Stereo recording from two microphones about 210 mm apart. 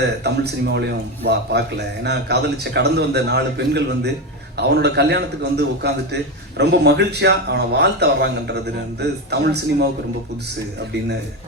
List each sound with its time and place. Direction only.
0.2 s speech: 50° right (ahead or behind)